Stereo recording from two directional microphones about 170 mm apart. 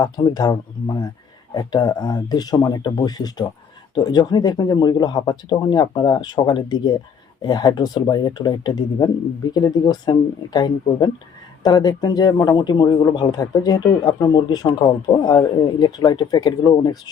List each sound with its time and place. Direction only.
0.0 s a man's voice: 25° left (ahead or behind)